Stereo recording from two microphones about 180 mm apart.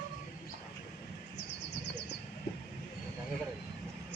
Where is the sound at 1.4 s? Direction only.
75° left (ahead or behind).